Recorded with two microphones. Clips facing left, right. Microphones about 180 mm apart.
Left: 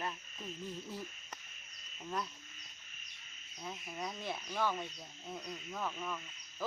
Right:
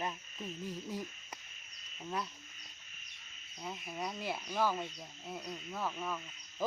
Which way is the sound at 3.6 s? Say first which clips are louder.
Right 2 dB; 5° right (ahead or behind).